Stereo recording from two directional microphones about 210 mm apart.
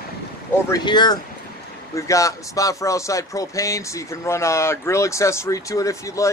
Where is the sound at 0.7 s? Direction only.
20° left (ahead or behind).